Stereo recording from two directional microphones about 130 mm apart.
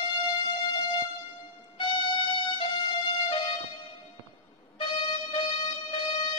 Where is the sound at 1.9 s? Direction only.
35° left (ahead or behind).